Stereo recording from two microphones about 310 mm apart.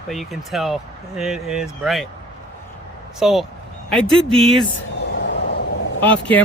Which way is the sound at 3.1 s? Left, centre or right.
Centre.